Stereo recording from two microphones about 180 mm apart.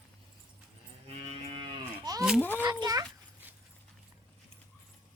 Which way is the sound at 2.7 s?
20° right (ahead or behind).